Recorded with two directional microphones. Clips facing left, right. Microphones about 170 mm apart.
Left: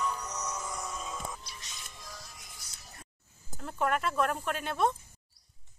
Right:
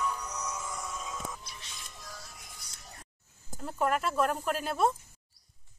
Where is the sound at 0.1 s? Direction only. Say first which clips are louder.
Even; 5° left (ahead or behind).